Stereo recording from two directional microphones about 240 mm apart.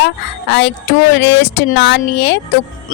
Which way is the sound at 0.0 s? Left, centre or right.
Left.